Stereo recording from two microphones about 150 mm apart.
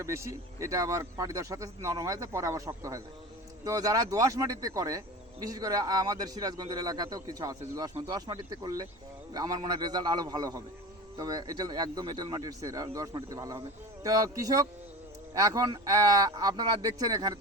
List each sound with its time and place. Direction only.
0.0 s speech: 20° right (ahead or behind)